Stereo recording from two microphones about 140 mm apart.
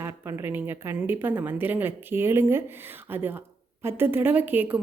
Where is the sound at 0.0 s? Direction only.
20° right (ahead or behind).